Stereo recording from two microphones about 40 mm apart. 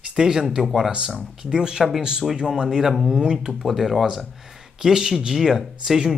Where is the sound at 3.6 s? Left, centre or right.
Centre.